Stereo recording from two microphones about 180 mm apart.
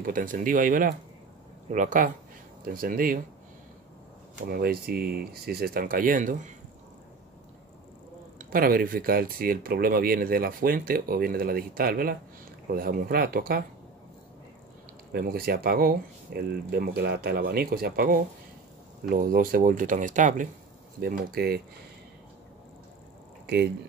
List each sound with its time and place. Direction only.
0.0 s speech: 50° right (ahead or behind)
4.5 s speech: 55° right (ahead or behind)
8.4 s speech: 50° right (ahead or behind)
15.1 s speech: 55° right (ahead or behind)
21.0 s speech: 60° right (ahead or behind)
23.4 s speech: 65° right (ahead or behind)